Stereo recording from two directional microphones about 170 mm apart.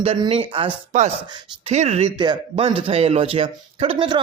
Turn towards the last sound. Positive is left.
turn(degrees=-30)  # may be behind; listen again after turning